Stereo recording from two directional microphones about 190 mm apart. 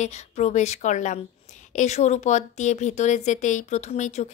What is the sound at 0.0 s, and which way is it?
Speech, 40° left (ahead or behind).